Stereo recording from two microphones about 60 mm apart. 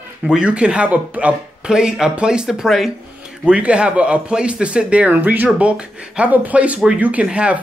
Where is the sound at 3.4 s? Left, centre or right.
Centre.